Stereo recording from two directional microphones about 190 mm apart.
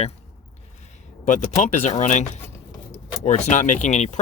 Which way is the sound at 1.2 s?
40° left (ahead or behind).